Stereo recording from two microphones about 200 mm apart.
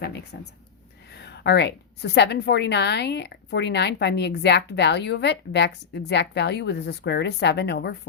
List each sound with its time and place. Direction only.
0.0 s a woman's voice: 55° left (ahead or behind)